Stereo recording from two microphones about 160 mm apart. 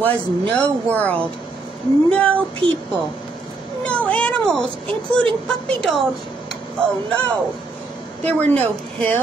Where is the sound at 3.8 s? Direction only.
5° left (ahead or behind).